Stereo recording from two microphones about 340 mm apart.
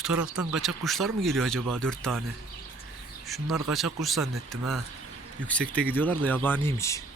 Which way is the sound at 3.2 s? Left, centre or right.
Centre.